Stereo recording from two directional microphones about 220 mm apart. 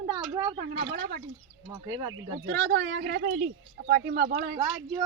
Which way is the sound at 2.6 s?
55° right (ahead or behind).